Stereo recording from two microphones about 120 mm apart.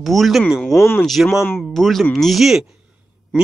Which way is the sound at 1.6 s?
Centre (ahead or behind).